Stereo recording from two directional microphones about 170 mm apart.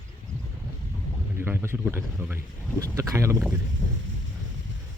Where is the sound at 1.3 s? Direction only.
15° right (ahead or behind).